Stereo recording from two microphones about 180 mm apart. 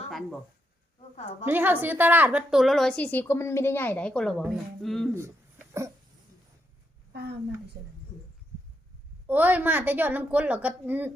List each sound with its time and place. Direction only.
0.1 s a sound: centre (ahead or behind)
1.1 s a woman's voice: 35° left (ahead or behind)
1.5 s a woman's voice: 10° right (ahead or behind)
5.1 s a sound: 15° right (ahead or behind)
7.1 s a woman's voice: 65° right (ahead or behind)
9.2 s a woman's voice: 10° right (ahead or behind)